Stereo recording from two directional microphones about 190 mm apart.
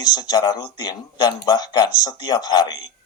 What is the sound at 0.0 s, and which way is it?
Speech, 20° left (ahead or behind).